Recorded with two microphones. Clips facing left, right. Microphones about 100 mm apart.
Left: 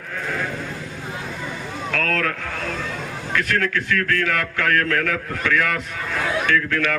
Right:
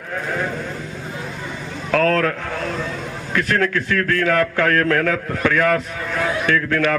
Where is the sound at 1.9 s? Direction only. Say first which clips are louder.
Right 7 dB; 30° right (ahead or behind).